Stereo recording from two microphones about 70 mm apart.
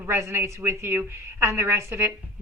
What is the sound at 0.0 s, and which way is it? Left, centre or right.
A woman's voice, right.